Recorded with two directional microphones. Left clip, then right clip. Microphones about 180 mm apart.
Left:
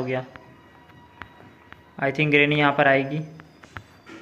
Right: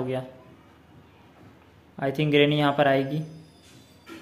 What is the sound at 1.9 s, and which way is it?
Speech, 10° right (ahead or behind).